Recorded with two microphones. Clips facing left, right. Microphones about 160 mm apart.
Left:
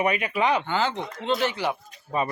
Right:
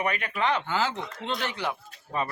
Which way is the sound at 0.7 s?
5° right (ahead or behind).